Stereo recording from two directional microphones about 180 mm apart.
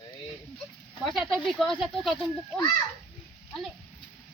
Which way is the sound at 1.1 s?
Centre (ahead or behind).